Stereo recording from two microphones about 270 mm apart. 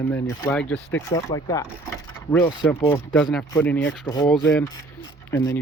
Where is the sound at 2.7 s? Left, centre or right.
Left.